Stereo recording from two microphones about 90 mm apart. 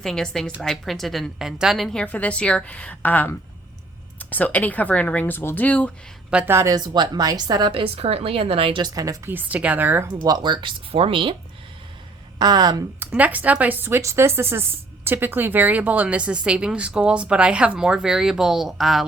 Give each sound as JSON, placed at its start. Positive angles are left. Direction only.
{"t": 0.0, "sound": "a woman's voice", "side_deg": 5}
{"t": 6.5, "sound": "speech", "side_deg": -30}
{"t": 6.7, "sound": "speech", "side_deg": -50}
{"t": 7.7, "sound": "a woman's voice", "side_deg": -85}
{"t": 8.8, "sound": "speech", "side_deg": -45}
{"t": 9.2, "sound": "speech", "side_deg": -20}
{"t": 10.1, "sound": "speech", "side_deg": -50}
{"t": 12.4, "sound": "speech", "side_deg": -50}
{"t": 13.0, "sound": "speech", "side_deg": -20}